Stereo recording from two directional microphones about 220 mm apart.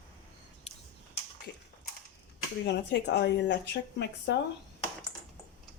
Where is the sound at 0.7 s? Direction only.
30° left (ahead or behind).